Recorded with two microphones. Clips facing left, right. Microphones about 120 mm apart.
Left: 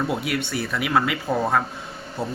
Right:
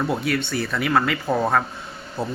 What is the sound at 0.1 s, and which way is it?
A man's voice, 10° left (ahead or behind).